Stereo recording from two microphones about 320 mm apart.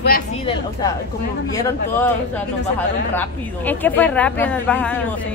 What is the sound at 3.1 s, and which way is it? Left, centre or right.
A woman's voice, centre.